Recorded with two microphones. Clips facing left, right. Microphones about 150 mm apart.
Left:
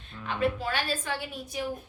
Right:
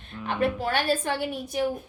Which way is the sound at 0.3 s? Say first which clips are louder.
Right 3 dB; 60° right (ahead or behind).